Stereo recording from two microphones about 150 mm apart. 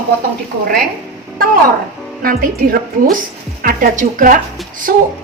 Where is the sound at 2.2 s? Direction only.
80° right.